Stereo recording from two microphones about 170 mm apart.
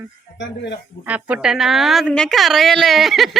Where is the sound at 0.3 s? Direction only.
90° left.